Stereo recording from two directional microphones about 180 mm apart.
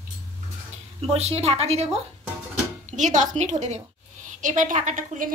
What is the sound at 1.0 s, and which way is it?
A woman's voice, 35° right (ahead or behind).